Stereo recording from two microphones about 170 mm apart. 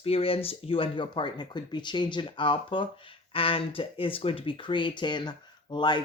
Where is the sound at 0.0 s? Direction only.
35° left (ahead or behind).